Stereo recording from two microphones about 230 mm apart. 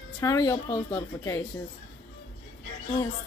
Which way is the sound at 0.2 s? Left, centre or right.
Centre.